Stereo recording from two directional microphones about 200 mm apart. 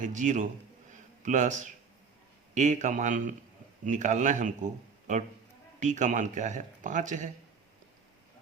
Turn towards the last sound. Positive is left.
turn(degrees=-40)  # may be behind; listen again after turning